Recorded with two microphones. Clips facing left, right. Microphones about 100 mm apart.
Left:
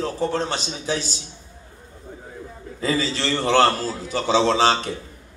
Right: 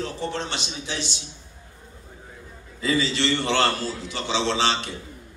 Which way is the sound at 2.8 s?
40° left (ahead or behind).